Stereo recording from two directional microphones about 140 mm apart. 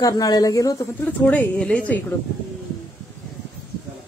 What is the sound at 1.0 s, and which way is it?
A woman's voice, 10° left (ahead or behind).